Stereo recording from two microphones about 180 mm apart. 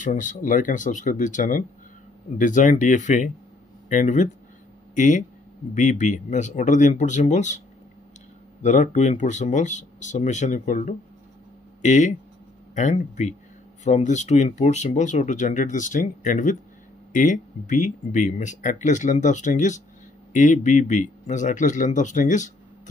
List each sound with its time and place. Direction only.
0.0 s speech: 45° left (ahead or behind)
8.6 s speech: 45° left (ahead or behind)